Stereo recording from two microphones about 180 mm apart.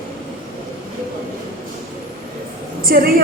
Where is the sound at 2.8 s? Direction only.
55° right (ahead or behind).